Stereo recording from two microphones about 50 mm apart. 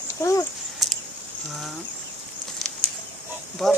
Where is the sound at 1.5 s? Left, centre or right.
Centre.